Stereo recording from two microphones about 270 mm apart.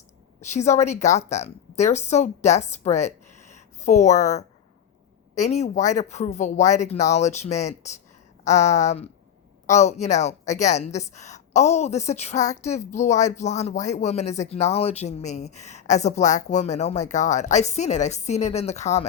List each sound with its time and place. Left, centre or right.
0.5 s a woman's voice: left